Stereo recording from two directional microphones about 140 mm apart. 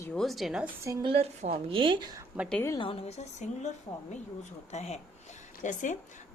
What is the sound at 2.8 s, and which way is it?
A woman's voice, 45° left (ahead or behind).